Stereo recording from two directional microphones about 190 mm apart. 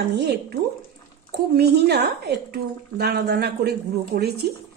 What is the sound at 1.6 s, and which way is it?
A woman's voice, 60° right (ahead or behind).